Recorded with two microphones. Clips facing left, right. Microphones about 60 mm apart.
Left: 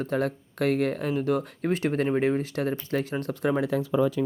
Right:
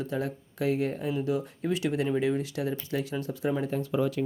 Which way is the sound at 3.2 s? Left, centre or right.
Left.